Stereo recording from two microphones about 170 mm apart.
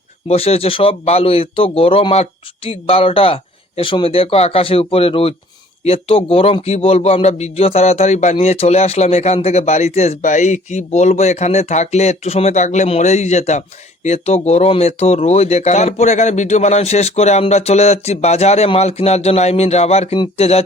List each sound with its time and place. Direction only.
0.3 s a man's voice: 35° left (ahead or behind)